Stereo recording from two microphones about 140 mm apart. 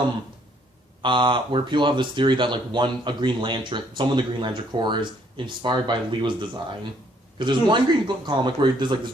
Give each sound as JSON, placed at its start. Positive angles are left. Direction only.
{"t": 1.0, "sound": "speech", "side_deg": -35}